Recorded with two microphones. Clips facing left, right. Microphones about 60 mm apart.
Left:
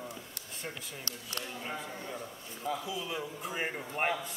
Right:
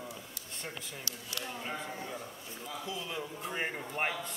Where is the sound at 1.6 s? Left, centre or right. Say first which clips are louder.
Even; centre.